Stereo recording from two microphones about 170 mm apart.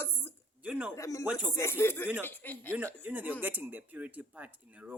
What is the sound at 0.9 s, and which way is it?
Speech, 20° left (ahead or behind).